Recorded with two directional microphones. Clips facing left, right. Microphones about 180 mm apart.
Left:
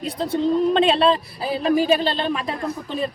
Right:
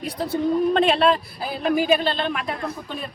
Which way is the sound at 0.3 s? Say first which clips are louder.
Left 1 dB; 30° left (ahead or behind).